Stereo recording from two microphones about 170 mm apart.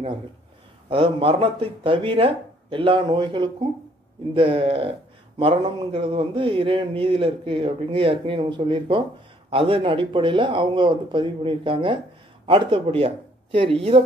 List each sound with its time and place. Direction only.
0.8 s speech: 30° right (ahead or behind)